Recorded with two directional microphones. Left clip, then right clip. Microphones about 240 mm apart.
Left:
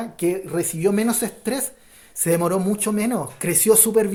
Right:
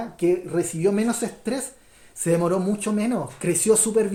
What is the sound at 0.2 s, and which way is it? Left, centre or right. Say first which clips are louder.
Speech: right 1 dB; left.